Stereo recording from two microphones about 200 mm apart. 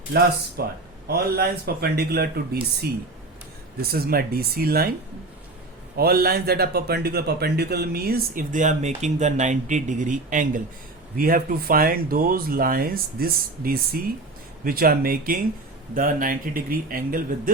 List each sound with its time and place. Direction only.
0.6 s a man's voice: 50° right (ahead or behind)
6.0 s a man's voice: 50° right (ahead or behind)